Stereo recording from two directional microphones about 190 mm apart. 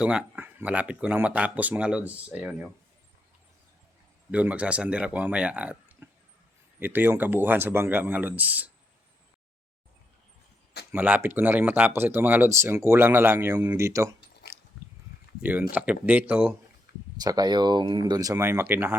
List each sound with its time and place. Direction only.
0.0 s speech: 5° right (ahead or behind)
4.3 s speech: 5° right (ahead or behind)
10.9 s speech: 10° right (ahead or behind)
15.4 s speech: 10° right (ahead or behind)
17.2 s speech: 20° right (ahead or behind)